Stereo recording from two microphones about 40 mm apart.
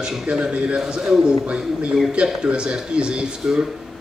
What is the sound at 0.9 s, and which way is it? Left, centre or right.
Speech, centre.